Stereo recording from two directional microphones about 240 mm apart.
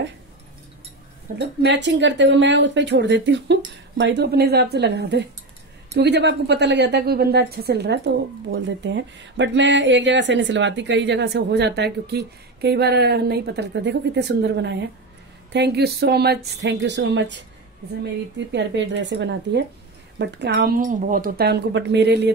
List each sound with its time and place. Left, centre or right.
1.4 s a woman's voice: right
18.5 s a woman's voice: right